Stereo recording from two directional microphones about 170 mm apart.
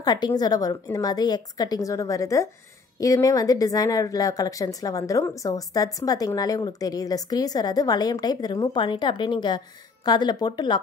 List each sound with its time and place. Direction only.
0.0 s a woman's voice: 25° left (ahead or behind)